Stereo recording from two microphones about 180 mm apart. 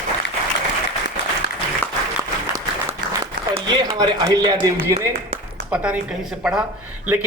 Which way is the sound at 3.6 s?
25° right (ahead or behind).